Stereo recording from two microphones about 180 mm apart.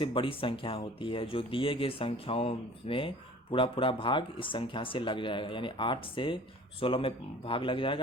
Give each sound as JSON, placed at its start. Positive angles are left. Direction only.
{"t": 0.0, "sound": "speech", "side_deg": 30}